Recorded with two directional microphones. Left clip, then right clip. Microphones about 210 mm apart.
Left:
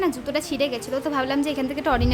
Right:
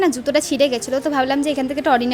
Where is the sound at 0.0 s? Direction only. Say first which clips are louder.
Right 7 dB; 25° right (ahead or behind).